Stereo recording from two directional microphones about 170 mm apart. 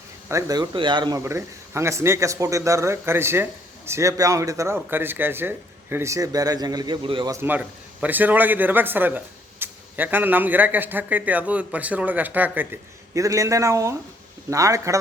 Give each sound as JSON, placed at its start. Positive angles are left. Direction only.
{"t": 0.3, "sound": "speech", "side_deg": -20}
{"t": 1.2, "sound": "speech", "side_deg": -15}
{"t": 7.4, "sound": "speech", "side_deg": -10}